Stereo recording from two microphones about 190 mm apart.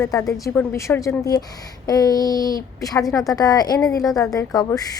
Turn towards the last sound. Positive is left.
turn(degrees=15)  # may be behind; listen again after turning